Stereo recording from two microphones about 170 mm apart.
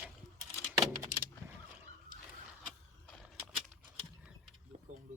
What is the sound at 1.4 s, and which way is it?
Vehicle, 15° right (ahead or behind).